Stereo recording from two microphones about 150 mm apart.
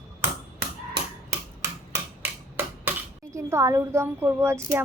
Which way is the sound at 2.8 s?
20° right (ahead or behind).